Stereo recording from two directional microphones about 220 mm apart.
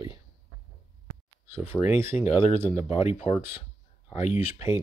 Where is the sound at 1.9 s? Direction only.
10° right (ahead or behind).